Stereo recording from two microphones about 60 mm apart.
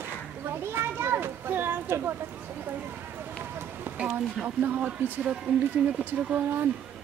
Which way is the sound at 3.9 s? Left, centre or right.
Centre.